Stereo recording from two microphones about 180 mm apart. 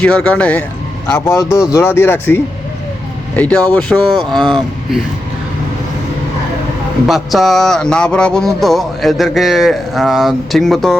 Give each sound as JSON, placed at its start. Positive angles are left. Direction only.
{"t": 0.0, "sound": "speech", "side_deg": 5}
{"t": 7.1, "sound": "speech", "side_deg": 0}